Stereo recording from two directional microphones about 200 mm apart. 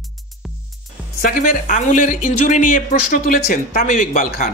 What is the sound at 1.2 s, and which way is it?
Speech, 45° left (ahead or behind).